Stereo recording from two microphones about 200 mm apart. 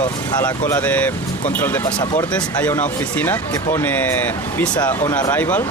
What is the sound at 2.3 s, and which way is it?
Speech, 10° left (ahead or behind).